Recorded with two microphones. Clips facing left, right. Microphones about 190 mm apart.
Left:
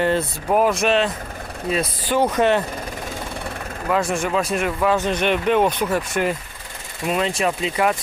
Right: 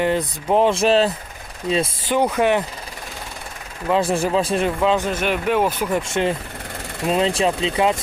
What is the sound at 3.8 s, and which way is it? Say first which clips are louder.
Speech: right 2 dB; 30° right (ahead or behind).